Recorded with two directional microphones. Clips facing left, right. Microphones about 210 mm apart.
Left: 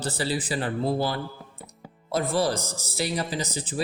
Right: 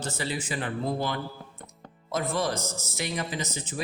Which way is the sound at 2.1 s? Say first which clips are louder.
Left 4 dB; 35° left (ahead or behind).